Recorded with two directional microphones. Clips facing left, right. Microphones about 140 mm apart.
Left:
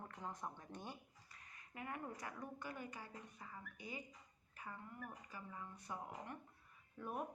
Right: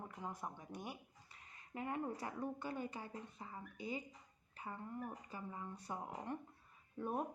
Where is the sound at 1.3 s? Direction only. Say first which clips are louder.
Right 8 dB; 25° right (ahead or behind).